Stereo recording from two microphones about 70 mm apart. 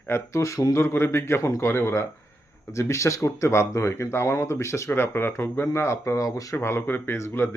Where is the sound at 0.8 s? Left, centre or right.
Left.